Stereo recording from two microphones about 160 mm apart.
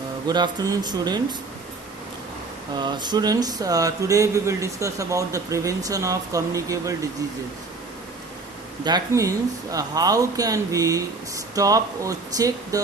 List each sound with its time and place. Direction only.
0.3 s speech: 25° right (ahead or behind)
2.7 s speech: 25° right (ahead or behind)
8.8 s speech: 25° right (ahead or behind)